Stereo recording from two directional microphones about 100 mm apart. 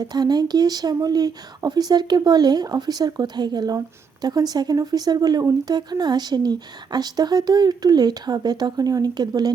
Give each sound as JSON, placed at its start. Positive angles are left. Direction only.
{"t": 0.1, "sound": "speech", "side_deg": -45}